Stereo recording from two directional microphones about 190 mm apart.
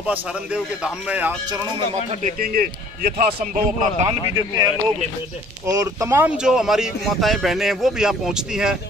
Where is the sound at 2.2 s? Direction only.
45° right (ahead or behind).